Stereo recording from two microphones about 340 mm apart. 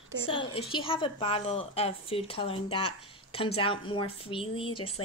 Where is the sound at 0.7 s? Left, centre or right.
Centre.